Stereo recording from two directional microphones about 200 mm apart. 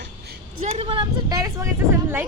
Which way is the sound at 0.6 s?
30° right (ahead or behind).